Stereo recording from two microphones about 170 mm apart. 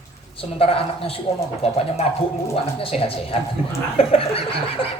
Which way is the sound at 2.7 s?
35° left (ahead or behind).